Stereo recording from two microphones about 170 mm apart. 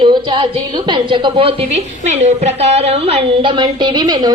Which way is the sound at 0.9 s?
25° right (ahead or behind).